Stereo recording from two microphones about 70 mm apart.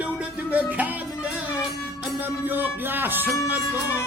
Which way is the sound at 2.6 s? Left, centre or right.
Right.